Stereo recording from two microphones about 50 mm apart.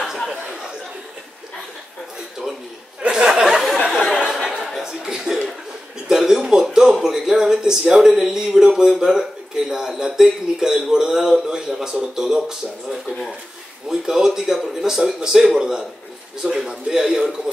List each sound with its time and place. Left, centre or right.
0.0 s a sound: centre
3.0 s a sound: centre
4.8 s chuckle: centre
5.2 s chuckle: centre
6.0 s speech: centre
13.8 s speech: centre